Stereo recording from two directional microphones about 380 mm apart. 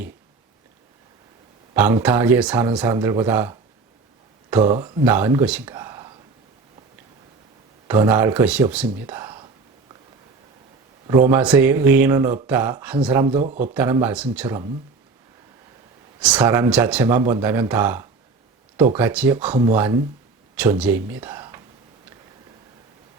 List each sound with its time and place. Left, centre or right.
1.7 s speech: centre
7.9 s speech: centre
11.3 s speech: centre
13.4 s speech: centre
13.7 s speech: centre
16.2 s speech: centre
20.6 s speech: centre